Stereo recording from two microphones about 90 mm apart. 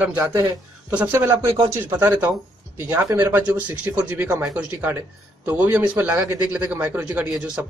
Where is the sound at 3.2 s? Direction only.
15° right (ahead or behind).